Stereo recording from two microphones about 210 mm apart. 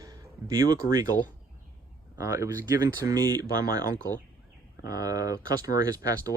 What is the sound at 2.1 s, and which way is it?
Speech, 15° right (ahead or behind).